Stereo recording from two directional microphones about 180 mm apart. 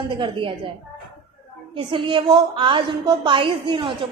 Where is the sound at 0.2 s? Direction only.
25° right (ahead or behind).